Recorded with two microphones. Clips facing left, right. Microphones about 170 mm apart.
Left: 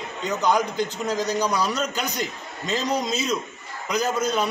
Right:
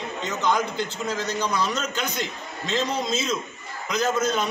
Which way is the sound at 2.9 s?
35° left (ahead or behind).